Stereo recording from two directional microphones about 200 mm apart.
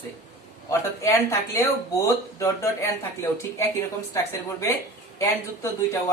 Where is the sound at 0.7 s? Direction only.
15° left (ahead or behind).